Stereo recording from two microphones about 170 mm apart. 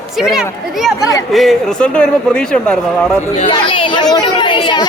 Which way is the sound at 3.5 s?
30° left (ahead or behind).